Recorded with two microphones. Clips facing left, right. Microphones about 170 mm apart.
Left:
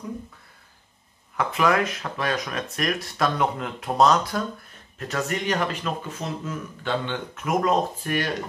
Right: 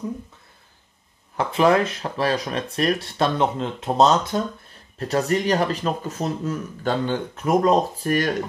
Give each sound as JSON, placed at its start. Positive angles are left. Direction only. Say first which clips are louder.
{"t": 1.3, "sound": "speech", "louder": "right 4 dB", "side_deg": -30}
{"t": 4.9, "sound": "speech", "louder": "right 6 dB", "side_deg": -35}